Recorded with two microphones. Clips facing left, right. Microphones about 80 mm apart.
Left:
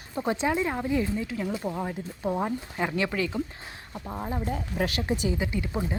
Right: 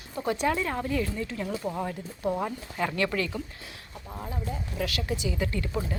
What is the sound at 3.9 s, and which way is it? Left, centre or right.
Speech, left.